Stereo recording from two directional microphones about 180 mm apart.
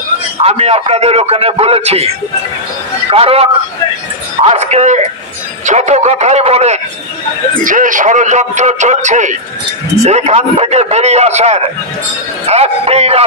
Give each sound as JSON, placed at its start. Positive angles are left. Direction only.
{"t": 0.4, "sound": "a man's voice", "side_deg": -35}
{"t": 3.1, "sound": "a man's voice", "side_deg": -35}
{"t": 4.5, "sound": "a man's voice", "side_deg": -35}
{"t": 7.6, "sound": "a man's voice", "side_deg": -45}